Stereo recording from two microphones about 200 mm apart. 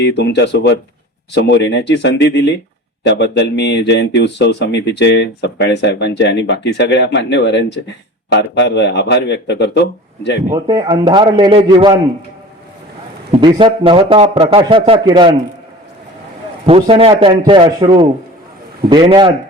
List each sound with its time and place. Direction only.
0.0 s speech: 60° left (ahead or behind)
10.5 s a man's voice: 20° right (ahead or behind)
13.3 s a man's voice: 25° right (ahead or behind)
16.6 s a man's voice: 30° right (ahead or behind)